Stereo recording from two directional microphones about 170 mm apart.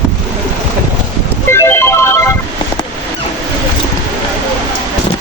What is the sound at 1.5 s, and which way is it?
Music, 15° left (ahead or behind).